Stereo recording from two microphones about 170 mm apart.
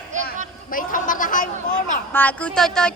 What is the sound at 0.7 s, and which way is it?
A man's voice, 55° left (ahead or behind).